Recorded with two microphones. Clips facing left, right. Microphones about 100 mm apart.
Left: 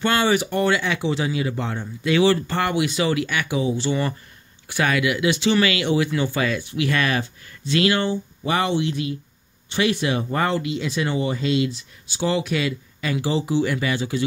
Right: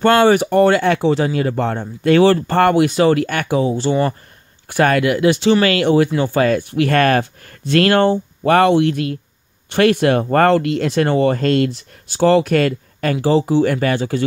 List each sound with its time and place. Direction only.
0.0 s speech: 45° right (ahead or behind)